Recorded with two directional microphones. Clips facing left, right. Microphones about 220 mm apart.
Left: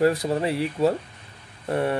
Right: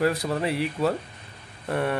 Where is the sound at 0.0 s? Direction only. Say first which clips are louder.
Left 3 dB; 30° left (ahead or behind).